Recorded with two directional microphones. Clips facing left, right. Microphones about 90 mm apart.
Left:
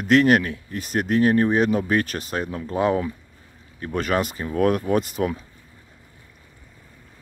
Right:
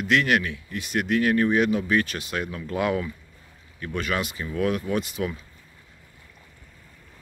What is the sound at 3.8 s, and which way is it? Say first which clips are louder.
Speech: left 5 dB; 40° left (ahead or behind).